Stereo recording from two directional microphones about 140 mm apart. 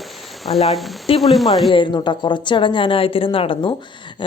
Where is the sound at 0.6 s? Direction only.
45° left (ahead or behind).